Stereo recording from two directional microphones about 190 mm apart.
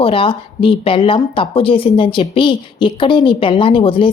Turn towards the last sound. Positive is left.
turn(degrees=30)  # may be behind; listen again after turning